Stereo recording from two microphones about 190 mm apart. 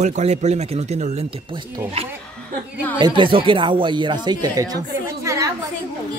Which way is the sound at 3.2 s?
25° right (ahead or behind).